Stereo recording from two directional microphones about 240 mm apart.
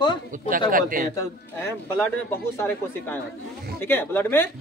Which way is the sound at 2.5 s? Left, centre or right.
Centre.